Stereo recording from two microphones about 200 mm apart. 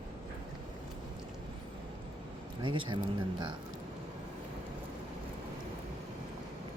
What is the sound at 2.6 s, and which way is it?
Speech, 25° right (ahead or behind).